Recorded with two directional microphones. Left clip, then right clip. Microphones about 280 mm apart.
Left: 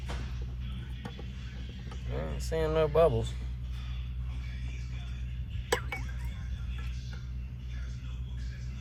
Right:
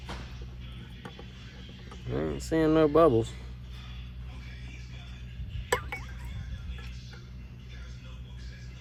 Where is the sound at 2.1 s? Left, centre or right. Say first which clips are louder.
Right 5 dB; right.